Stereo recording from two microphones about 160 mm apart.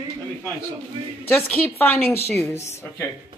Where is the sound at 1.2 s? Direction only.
10° left (ahead or behind).